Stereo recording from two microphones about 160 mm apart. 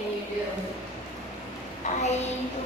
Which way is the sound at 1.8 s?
50° left (ahead or behind).